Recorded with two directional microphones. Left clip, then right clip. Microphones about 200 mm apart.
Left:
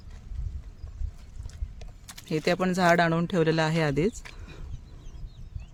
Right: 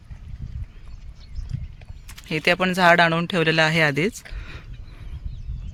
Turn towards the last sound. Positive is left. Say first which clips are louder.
# right 6 dB
turn(degrees=0)  # may be behind; listen again after turning